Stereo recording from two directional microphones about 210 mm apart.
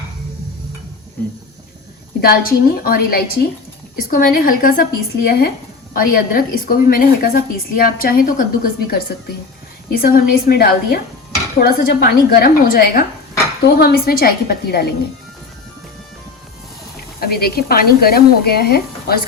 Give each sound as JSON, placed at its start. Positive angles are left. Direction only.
{"t": 2.2, "sound": "a woman's voice", "side_deg": 45}
{"t": 17.2, "sound": "a woman's voice", "side_deg": 45}